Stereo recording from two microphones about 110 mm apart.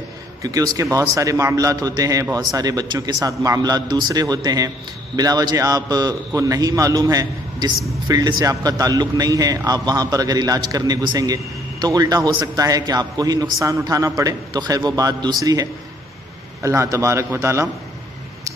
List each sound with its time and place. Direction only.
0.4 s a man's voice: 30° right (ahead or behind)